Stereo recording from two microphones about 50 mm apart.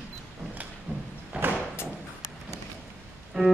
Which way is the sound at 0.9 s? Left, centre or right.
Right.